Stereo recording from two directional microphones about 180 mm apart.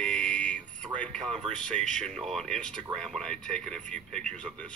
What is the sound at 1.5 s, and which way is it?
Speech, 5° left (ahead or behind).